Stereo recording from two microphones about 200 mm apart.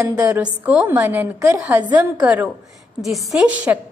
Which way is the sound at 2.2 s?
5° right (ahead or behind).